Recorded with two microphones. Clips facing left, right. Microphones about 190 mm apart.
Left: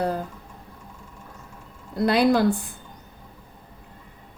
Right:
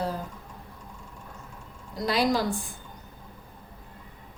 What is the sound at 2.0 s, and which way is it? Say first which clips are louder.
Speech: left 6 dB; 60° left (ahead or behind).